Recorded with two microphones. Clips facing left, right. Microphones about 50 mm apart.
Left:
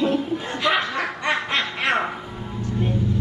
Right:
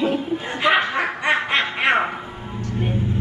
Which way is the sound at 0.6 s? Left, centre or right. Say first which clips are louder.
Right 4 dB; right.